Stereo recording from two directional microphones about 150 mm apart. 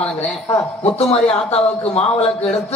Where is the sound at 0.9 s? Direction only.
45° left (ahead or behind).